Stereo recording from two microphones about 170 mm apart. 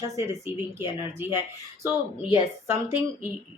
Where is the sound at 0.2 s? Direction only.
15° right (ahead or behind).